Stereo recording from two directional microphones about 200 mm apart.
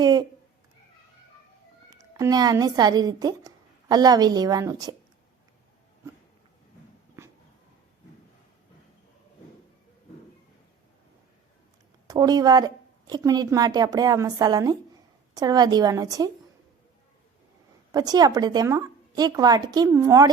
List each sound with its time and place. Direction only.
0.0 s cat: 20° right (ahead or behind)
1.9 s a woman's voice: 20° right (ahead or behind)
7.2 s dog: 15° right (ahead or behind)
12.0 s a woman's voice: 20° right (ahead or behind)
17.9 s a woman's voice: 20° right (ahead or behind)